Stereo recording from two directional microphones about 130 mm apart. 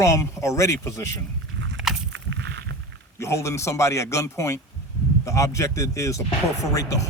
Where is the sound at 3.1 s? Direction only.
20° left (ahead or behind).